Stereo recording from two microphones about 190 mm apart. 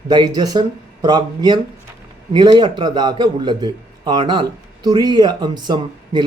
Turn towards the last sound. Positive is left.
turn(degrees=-20)  # may be behind; listen again after turning